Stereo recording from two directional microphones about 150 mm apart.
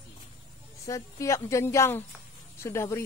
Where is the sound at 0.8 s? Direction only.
20° left (ahead or behind).